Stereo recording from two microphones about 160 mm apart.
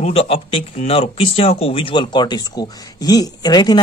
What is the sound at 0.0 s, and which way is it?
Speech, 40° left (ahead or behind).